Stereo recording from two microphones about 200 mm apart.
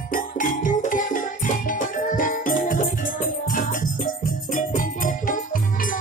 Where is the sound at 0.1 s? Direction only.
40° left (ahead or behind).